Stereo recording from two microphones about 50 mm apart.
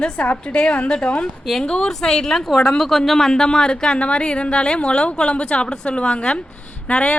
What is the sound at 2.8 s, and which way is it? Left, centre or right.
Speech, centre.